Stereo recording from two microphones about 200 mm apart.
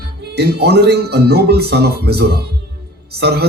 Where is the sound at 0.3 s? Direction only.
55° right (ahead or behind).